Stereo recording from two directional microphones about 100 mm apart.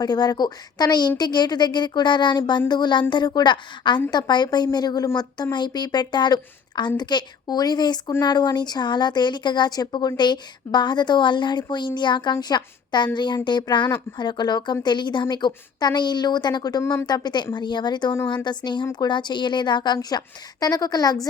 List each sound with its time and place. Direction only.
0.0 s speech: 40° left (ahead or behind)